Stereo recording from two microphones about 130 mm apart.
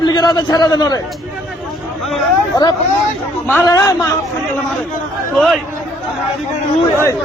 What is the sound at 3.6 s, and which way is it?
Speech, 25° left (ahead or behind).